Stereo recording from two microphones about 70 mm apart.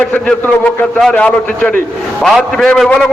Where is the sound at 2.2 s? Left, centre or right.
Centre.